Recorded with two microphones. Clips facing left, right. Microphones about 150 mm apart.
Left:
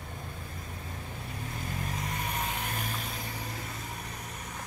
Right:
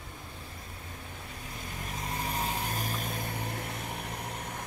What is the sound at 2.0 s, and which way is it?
Vehicle, 35° right (ahead or behind).